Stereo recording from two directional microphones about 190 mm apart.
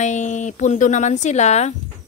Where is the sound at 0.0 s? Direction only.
40° left (ahead or behind).